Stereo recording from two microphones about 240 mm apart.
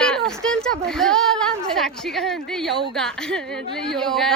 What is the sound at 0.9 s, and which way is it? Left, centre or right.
A woman's voice, centre.